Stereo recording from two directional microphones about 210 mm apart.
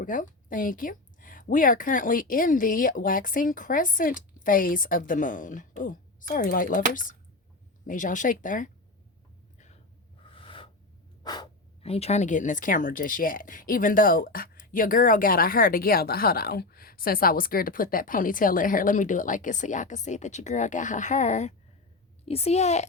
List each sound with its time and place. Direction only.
0.0 s speech: 40° left (ahead or behind)
10.2 s gasp: 25° left (ahead or behind)
11.2 s speech: 20° left (ahead or behind)